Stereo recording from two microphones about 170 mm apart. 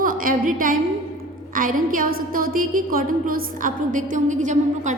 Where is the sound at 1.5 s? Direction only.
55° right (ahead or behind).